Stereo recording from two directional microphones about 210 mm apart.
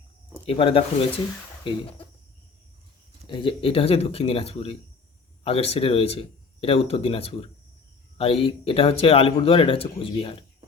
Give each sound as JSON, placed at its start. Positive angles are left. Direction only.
{"t": 0.4, "sound": "speech", "side_deg": 25}
{"t": 3.2, "sound": "speech", "side_deg": 25}